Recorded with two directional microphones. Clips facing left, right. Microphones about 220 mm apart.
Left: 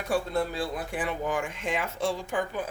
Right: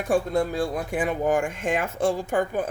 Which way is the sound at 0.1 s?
50° right (ahead or behind).